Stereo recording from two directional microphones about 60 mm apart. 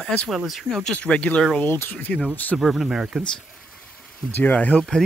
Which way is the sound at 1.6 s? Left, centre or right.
Left.